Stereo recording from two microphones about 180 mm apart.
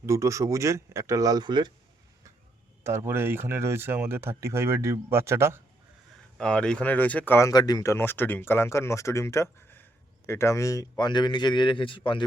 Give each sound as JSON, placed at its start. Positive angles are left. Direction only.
{"t": 0.0, "sound": "speech", "side_deg": -15}
{"t": 2.8, "sound": "speech", "side_deg": -15}
{"t": 6.3, "sound": "speech", "side_deg": 5}